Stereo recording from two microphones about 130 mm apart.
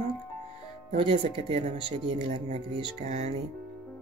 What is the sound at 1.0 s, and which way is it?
Speech, 45° right (ahead or behind).